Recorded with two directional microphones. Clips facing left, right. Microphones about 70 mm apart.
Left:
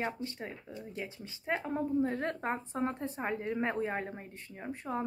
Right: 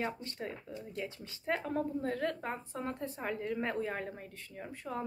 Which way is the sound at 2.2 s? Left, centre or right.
Left.